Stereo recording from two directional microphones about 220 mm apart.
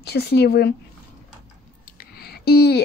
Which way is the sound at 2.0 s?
45° left (ahead or behind).